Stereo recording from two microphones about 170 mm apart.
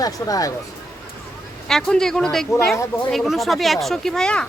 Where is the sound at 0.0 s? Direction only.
20° left (ahead or behind).